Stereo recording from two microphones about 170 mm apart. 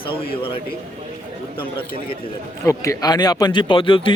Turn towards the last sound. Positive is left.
turn(degrees=30)  # may be behind; listen again after turning